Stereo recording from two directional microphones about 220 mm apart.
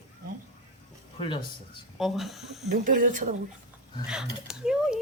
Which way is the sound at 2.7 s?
40° right (ahead or behind).